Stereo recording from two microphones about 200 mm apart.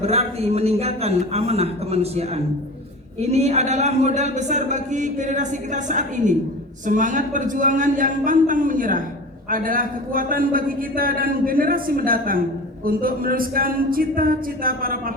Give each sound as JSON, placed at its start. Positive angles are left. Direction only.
{"t": 0.0, "sound": "a man's voice", "side_deg": -30}